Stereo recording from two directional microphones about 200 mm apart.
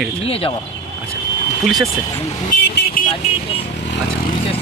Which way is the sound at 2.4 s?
45° left (ahead or behind).